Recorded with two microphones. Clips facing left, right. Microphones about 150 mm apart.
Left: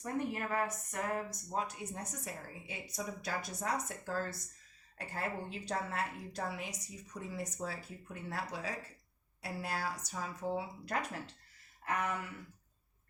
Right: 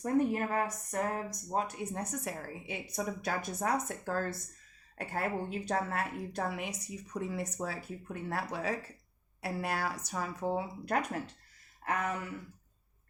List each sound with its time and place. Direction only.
0.0 s a woman's voice: 40° right (ahead or behind)